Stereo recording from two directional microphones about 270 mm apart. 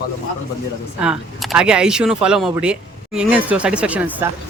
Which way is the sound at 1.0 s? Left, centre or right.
Centre.